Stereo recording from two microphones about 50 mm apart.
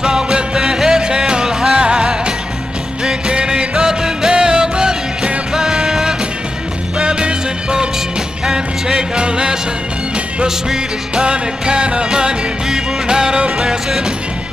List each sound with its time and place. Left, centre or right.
0.0 s music: centre